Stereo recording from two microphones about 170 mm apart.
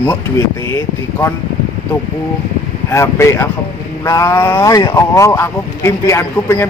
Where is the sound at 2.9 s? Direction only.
15° left (ahead or behind).